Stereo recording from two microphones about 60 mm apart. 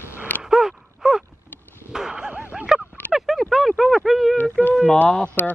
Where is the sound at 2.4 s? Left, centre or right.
Right.